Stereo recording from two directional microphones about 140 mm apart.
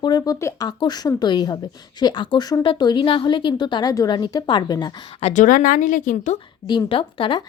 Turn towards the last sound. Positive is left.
turn(degrees=35)  # may be behind; listen again after turning